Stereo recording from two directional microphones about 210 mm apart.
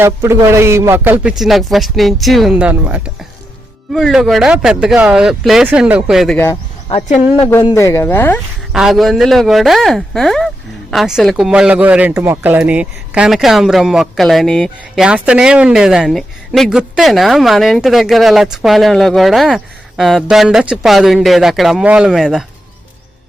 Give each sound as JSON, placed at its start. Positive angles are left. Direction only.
{"t": 0.0, "sound": "speech", "side_deg": -10}
{"t": 6.8, "sound": "speech", "side_deg": 25}
{"t": 8.7, "sound": "speech", "side_deg": 0}